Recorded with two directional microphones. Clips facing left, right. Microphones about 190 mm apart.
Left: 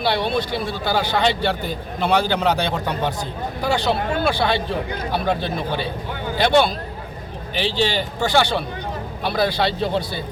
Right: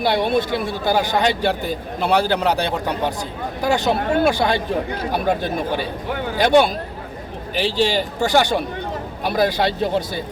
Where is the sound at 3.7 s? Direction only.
45° right (ahead or behind).